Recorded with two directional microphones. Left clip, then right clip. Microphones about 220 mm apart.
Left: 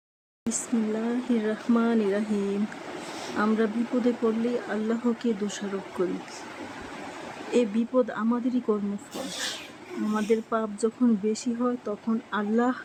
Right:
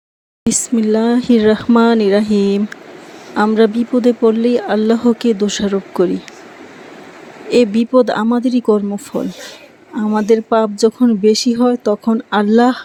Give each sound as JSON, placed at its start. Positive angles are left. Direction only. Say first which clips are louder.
{"t": 0.4, "sound": "speech", "louder": "right 13 dB", "side_deg": -35}
{"t": 7.5, "sound": "speech", "louder": "right 13 dB", "side_deg": -30}
{"t": 10.2, "sound": "speech", "louder": "right 14 dB", "side_deg": -30}